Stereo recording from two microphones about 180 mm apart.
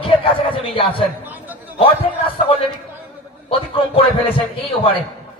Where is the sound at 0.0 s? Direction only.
30° left (ahead or behind).